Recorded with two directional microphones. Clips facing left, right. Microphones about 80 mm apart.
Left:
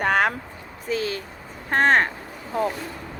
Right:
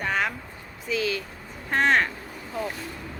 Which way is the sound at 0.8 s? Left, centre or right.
Left.